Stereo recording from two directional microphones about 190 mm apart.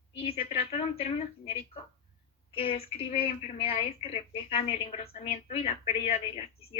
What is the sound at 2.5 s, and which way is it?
A woman's voice, 30° left (ahead or behind).